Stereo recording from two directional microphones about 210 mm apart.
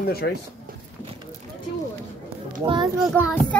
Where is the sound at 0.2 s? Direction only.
55° left (ahead or behind).